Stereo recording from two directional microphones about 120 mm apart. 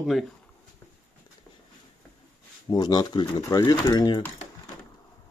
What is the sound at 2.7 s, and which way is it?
Speech, 35° left (ahead or behind).